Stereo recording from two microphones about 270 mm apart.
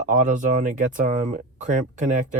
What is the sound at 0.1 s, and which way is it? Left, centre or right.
Speech, right.